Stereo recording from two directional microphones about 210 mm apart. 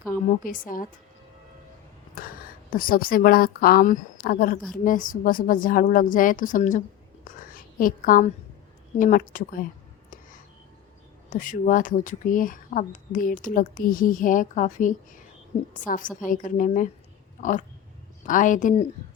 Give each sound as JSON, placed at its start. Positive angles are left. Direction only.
{"t": 0.1, "sound": "speech", "side_deg": 40}
{"t": 2.2, "sound": "a sound", "side_deg": 40}
{"t": 2.7, "sound": "a woman's voice", "side_deg": 40}
{"t": 7.3, "sound": "a sound", "side_deg": 40}
{"t": 9.0, "sound": "speech", "side_deg": 40}
{"t": 11.3, "sound": "speech", "side_deg": 40}